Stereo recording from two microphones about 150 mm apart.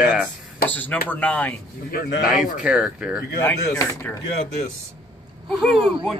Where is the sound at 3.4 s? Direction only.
20° left (ahead or behind).